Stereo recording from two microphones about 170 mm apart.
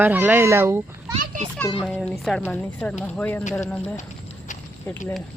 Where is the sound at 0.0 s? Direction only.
10° right (ahead or behind).